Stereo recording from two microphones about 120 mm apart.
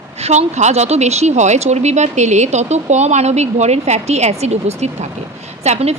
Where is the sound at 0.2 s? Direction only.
65° right (ahead or behind).